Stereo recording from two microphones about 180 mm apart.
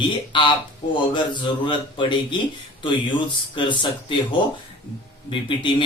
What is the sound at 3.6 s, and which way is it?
Speech, 25° left (ahead or behind).